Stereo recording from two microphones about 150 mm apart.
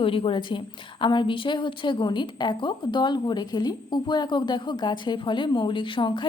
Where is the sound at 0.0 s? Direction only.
35° left (ahead or behind).